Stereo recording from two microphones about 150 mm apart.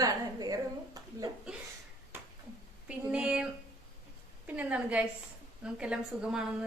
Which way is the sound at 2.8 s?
5° right (ahead or behind).